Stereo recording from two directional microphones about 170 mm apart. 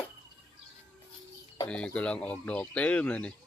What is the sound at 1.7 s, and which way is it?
Speech, 5° left (ahead or behind).